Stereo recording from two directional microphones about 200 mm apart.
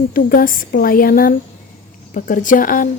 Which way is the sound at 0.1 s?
45° left (ahead or behind).